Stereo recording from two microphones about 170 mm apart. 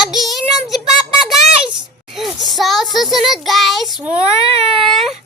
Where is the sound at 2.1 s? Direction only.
Centre (ahead or behind).